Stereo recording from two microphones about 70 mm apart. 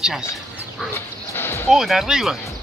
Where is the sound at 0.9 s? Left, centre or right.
Left.